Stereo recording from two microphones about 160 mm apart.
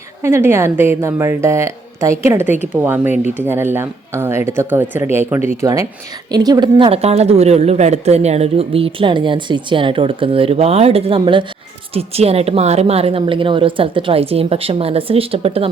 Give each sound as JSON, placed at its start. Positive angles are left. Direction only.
{"t": 0.2, "sound": "a woman's voice", "side_deg": -15}
{"t": 5.4, "sound": "speech", "side_deg": 45}
{"t": 5.6, "sound": "a woman's voice", "side_deg": -20}